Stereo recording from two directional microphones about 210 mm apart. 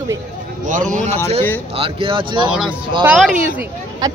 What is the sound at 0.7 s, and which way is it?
Speech, 40° right (ahead or behind).